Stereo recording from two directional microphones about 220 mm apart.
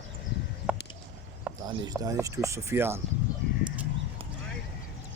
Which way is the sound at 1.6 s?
15° right (ahead or behind).